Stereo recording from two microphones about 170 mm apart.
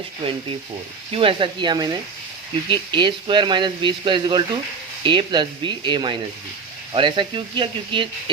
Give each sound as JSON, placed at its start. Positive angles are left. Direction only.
{"t": 0.2, "sound": "speech", "side_deg": -30}